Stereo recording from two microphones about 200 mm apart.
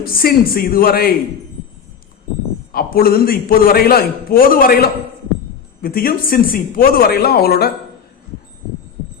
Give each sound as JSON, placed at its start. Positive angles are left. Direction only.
{"t": 0.0, "sound": "a man's voice", "side_deg": 45}
{"t": 2.7, "sound": "a man's voice", "side_deg": 50}